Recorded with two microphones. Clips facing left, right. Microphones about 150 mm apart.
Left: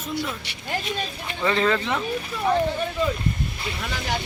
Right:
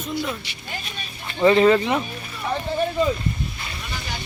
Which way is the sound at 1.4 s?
20° right (ahead or behind).